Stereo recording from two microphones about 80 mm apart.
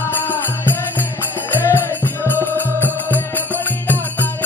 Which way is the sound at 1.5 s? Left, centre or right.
Left.